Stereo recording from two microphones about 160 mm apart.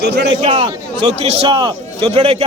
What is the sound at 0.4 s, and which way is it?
A man's voice, 35° right (ahead or behind).